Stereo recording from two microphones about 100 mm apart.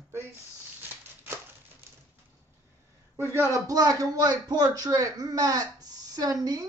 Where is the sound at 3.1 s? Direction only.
25° right (ahead or behind).